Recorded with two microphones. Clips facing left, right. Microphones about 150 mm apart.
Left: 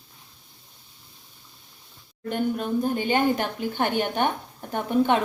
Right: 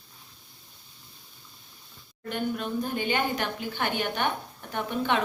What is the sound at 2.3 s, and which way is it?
Speech, 45° left (ahead or behind).